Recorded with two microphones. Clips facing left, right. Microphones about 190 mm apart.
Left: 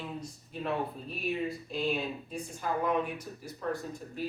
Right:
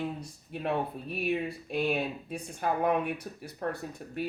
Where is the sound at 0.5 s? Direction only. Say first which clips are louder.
Right 2 dB; 60° right (ahead or behind).